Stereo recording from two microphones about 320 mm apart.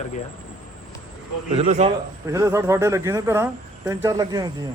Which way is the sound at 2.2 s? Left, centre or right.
Centre.